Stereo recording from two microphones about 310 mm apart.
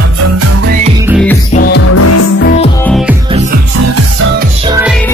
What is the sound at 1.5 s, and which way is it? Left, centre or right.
Music, left.